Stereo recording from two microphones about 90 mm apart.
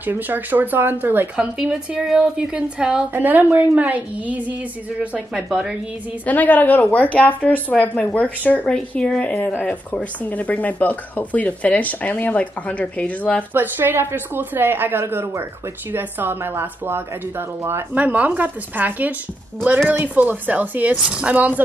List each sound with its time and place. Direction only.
0.0 s speech: 20° right (ahead or behind)
1.3 s a woman's voice: 10° right (ahead or behind)
5.3 s speech: 5° right (ahead or behind)
6.2 s speech: 20° left (ahead or behind)
13.5 s a woman's voice: 20° right (ahead or behind)